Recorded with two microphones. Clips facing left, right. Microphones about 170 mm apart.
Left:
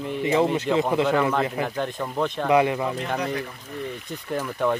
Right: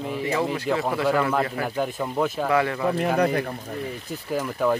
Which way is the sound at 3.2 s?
60° right (ahead or behind).